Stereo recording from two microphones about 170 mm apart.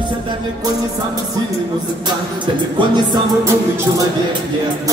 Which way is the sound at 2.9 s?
25° right (ahead or behind).